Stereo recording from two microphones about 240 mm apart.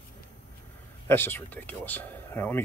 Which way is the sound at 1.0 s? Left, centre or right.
Centre.